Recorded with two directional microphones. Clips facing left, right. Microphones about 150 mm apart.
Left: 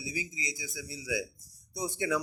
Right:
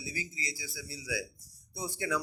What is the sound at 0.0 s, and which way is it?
A man's voice, 15° left (ahead or behind).